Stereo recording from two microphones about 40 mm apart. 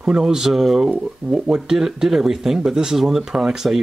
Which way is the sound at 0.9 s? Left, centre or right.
Right.